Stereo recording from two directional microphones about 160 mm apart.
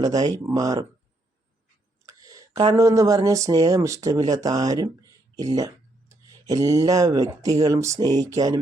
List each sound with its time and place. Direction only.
0.0 s speech: 25° right (ahead or behind)
2.0 s speech: 20° right (ahead or behind)
5.5 s a sound: 20° right (ahead or behind)
6.5 s speech: 20° right (ahead or behind)